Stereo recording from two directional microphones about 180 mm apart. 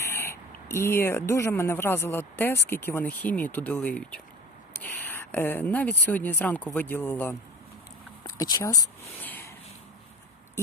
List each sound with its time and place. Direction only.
0.0 s speech: 15° left (ahead or behind)
8.2 s speech: 20° left (ahead or behind)